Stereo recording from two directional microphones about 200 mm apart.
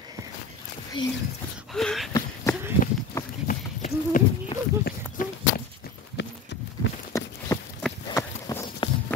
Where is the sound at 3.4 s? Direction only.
40° left (ahead or behind).